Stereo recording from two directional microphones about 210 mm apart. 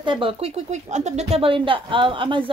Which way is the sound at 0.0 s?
25° right (ahead or behind).